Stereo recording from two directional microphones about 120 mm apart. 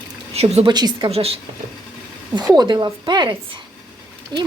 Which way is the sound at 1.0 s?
55° right (ahead or behind).